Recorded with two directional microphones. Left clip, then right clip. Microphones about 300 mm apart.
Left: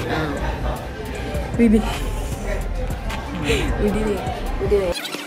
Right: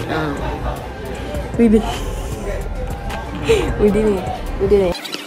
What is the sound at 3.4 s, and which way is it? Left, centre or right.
Speech, centre.